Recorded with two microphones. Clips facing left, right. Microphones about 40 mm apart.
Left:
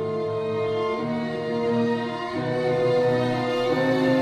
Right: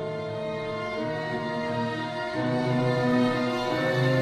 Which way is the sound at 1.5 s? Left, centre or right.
Centre.